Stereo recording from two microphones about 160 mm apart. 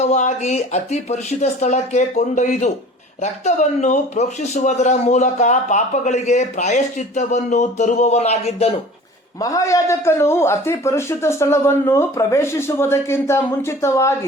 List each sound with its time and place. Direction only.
0.1 s speech: 50° left (ahead or behind)
9.4 s speech: 20° left (ahead or behind)